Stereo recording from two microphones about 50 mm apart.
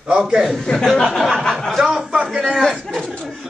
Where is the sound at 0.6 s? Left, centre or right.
Centre.